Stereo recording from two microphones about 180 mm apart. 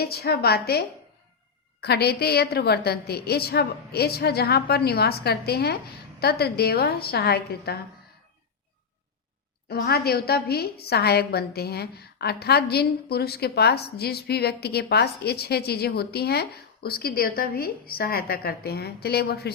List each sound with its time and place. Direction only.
0.0 s a woman's voice: 60° left (ahead or behind)
9.6 s a woman's voice: 60° left (ahead or behind)